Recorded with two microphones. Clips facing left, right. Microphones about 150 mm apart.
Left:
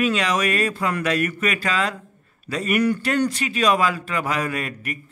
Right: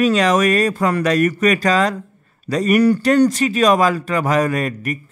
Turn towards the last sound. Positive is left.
turn(degrees=-45)  # may be behind; listen again after turning